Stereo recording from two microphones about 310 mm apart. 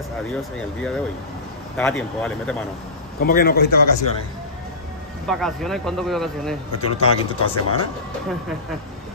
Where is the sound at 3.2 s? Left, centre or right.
Left.